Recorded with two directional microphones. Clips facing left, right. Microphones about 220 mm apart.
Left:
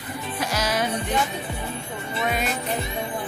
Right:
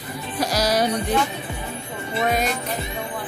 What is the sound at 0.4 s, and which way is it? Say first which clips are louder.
Music: right 5 dB; 35° right (ahead or behind).